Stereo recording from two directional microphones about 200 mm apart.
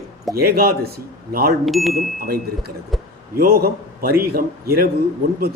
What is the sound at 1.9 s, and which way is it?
A man's voice, 45° right (ahead or behind).